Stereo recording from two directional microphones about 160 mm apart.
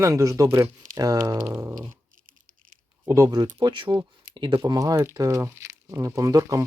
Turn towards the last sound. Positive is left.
turn(degrees=-20)  # may be behind; listen again after turning